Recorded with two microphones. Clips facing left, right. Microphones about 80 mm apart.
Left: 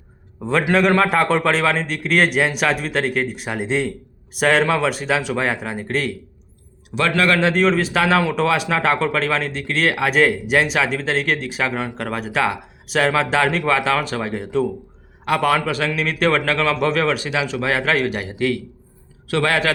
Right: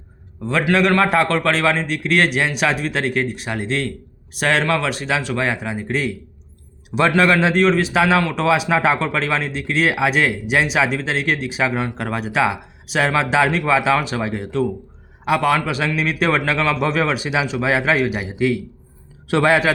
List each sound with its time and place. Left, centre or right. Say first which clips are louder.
0.7 s a man's voice: right 1 dB; centre
7.2 s a man's voice: right 1 dB; centre
7.5 s a man's voice: right 1 dB; centre
8.2 s speech: left 2 dB; centre
8.4 s a man's voice: right 2 dB; centre
19.3 s a man's voice: right 3 dB; right